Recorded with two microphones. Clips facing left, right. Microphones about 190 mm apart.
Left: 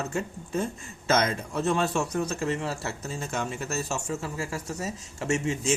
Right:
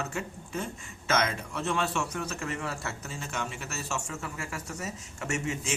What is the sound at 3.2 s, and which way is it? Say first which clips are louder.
Speech: left 6 dB; 40° left (ahead or behind).